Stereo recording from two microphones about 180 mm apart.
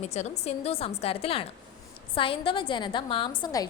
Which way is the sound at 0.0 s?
40° left (ahead or behind).